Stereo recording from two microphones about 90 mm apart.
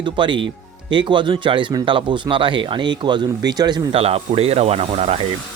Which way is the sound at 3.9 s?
90° right.